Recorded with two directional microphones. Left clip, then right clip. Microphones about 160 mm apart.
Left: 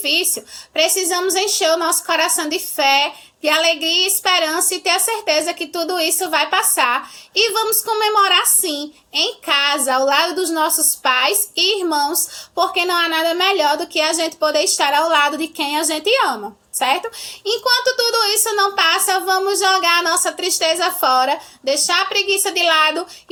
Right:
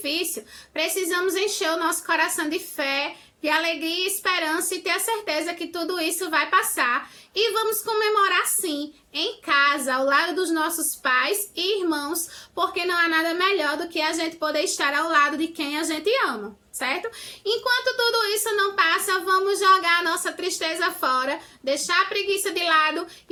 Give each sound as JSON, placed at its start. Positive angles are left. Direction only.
{"t": 0.8, "sound": "a woman's voice", "side_deg": -20}
{"t": 17.4, "sound": "speech", "side_deg": -20}